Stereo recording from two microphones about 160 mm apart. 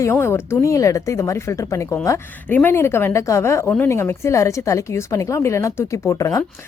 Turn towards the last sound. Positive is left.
turn(degrees=20)  # may be behind; listen again after turning